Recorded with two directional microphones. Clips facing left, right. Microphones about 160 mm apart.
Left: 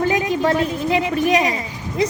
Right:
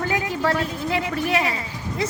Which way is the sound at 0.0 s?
20° left (ahead or behind).